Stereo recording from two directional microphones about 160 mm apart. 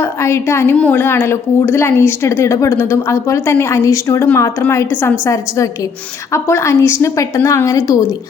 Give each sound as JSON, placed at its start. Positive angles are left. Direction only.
{"t": 0.0, "sound": "a woman's voice", "side_deg": 15}